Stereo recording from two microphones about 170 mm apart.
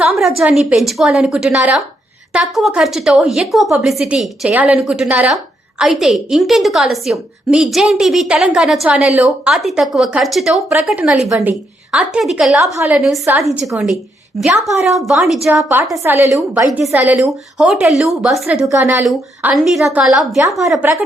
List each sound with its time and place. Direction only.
0.0 s a woman's voice: centre (ahead or behind)
12.7 s speech: 15° right (ahead or behind)
13.4 s a woman's voice: 5° right (ahead or behind)
16.0 s a woman's voice: 15° right (ahead or behind)
18.7 s speech: 15° right (ahead or behind)
19.0 s a woman's voice: 5° right (ahead or behind)